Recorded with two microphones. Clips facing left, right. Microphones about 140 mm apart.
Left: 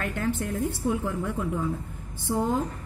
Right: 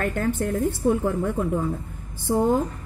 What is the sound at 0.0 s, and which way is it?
A woman's voice, 50° right (ahead or behind).